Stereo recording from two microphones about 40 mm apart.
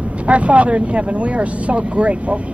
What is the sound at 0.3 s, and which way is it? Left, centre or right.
Speech, right.